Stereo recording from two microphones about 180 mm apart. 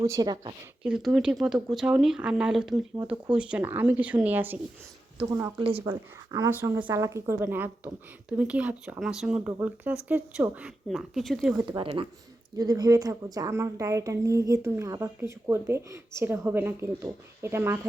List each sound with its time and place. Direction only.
0.0 s speech: 20° right (ahead or behind)
0.8 s a woman's voice: 5° right (ahead or behind)
11.8 s a woman's voice: 30° right (ahead or behind); by 17.7 s 15° right (ahead or behind)